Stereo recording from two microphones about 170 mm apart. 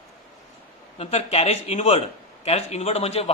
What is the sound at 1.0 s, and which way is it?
A man's voice, 35° left (ahead or behind).